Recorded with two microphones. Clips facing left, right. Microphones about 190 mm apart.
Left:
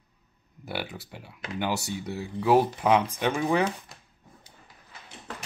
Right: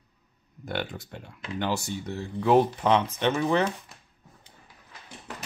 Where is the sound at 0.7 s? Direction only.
5° left (ahead or behind).